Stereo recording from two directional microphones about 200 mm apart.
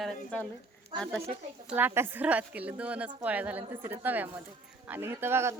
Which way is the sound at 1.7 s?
10° right (ahead or behind).